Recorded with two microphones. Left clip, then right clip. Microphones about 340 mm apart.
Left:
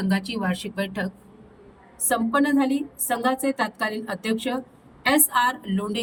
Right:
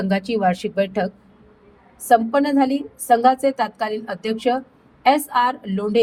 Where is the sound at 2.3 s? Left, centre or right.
Centre.